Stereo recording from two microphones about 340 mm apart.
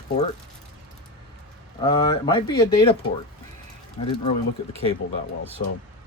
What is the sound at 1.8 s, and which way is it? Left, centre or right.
Speech, centre.